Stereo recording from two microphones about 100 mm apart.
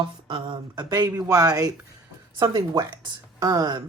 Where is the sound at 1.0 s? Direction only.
35° right (ahead or behind).